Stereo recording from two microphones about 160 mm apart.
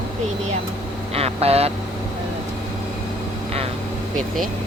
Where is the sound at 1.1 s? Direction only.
40° right (ahead or behind).